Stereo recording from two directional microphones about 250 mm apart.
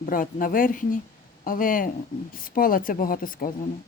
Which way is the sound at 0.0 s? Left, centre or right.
Left.